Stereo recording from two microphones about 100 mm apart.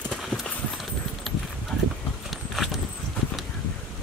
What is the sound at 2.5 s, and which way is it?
Horse, centre (ahead or behind).